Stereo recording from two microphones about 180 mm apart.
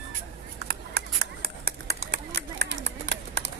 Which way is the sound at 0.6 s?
65° right (ahead or behind).